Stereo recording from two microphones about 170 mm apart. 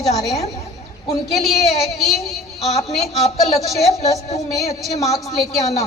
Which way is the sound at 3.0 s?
40° left (ahead or behind).